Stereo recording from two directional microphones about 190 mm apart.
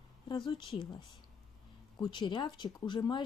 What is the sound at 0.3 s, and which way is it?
A woman's voice, 25° left (ahead or behind).